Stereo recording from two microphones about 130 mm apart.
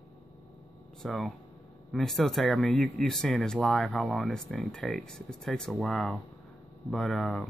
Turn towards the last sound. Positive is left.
turn(degrees=0)  # may be behind; listen again after turning